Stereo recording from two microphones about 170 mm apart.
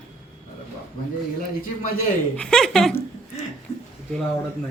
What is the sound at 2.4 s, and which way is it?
Speech, 5° left (ahead or behind).